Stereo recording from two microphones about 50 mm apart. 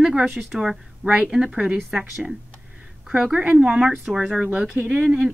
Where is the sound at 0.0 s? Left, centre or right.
Centre.